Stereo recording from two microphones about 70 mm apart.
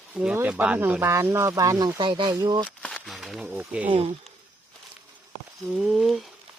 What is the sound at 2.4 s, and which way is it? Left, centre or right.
Speech, right.